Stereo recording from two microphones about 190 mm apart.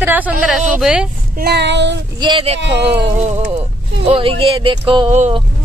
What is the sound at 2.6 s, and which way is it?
Music, 65° right (ahead or behind).